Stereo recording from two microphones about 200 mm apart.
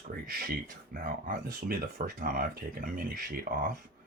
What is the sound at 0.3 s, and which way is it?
Speech, 45° right (ahead or behind).